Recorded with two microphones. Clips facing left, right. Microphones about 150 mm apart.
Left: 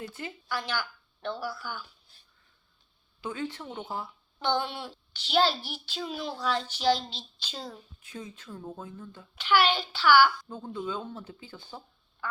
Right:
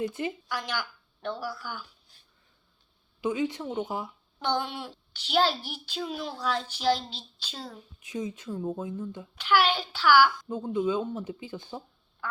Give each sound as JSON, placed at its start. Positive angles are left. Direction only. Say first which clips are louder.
{"t": 0.0, "sound": "speech", "louder": "right 8 dB", "side_deg": -20}
{"t": 3.2, "sound": "a child's voice", "louder": "right 6 dB", "side_deg": -15}
{"t": 7.5, "sound": "a woman's voice", "louder": "left 1 dB", "side_deg": 0}
{"t": 8.0, "sound": "speech", "louder": "right 9 dB", "side_deg": -15}
{"t": 9.4, "sound": "speech", "louder": "even", "side_deg": -5}
{"t": 10.5, "sound": "speech", "louder": "right 7 dB", "side_deg": -15}